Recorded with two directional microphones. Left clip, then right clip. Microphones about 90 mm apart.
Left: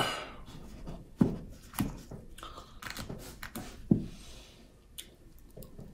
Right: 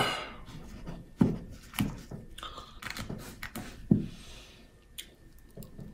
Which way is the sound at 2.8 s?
10° left (ahead or behind).